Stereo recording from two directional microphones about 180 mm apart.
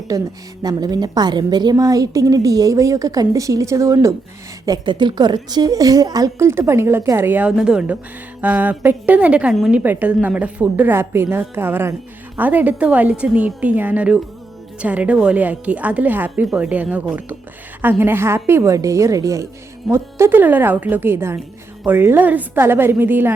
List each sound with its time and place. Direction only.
0.1 s a woman's voice: 20° right (ahead or behind)